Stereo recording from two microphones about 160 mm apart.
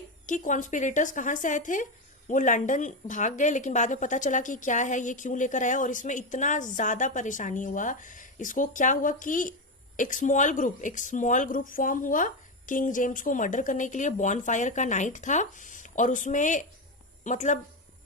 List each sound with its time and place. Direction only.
0.3 s a woman's voice: 50° left (ahead or behind)